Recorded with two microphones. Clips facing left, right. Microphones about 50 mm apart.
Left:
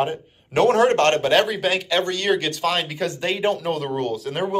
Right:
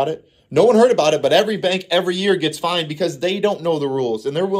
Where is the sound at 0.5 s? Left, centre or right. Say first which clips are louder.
Right 4 dB; left.